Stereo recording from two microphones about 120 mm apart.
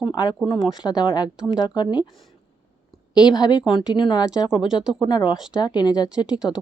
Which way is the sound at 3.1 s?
35° left (ahead or behind).